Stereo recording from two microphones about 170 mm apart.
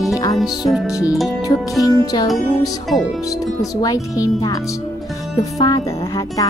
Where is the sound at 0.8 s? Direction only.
20° left (ahead or behind).